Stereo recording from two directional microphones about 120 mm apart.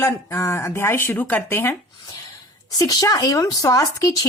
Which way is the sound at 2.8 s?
30° left (ahead or behind).